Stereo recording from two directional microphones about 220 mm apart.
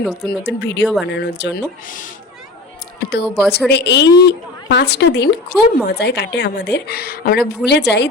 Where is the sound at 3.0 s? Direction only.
45° left (ahead or behind).